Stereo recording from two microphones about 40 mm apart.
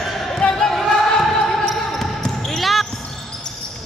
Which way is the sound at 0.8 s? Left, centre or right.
Centre.